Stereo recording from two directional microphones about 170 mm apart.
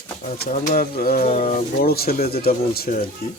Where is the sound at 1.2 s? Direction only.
45° left (ahead or behind); by 3.0 s 60° left (ahead or behind).